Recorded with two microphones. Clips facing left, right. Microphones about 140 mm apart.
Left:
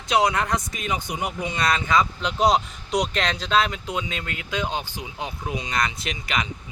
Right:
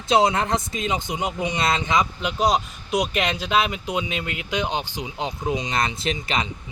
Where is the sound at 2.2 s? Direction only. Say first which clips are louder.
Left 1 dB; 5° right (ahead or behind).